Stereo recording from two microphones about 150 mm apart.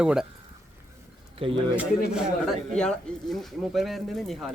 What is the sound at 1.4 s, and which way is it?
Speech, 35° right (ahead or behind).